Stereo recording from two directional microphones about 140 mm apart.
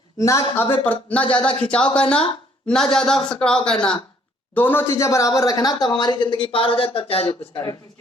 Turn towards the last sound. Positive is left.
turn(degrees=35)  # may be behind; listen again after turning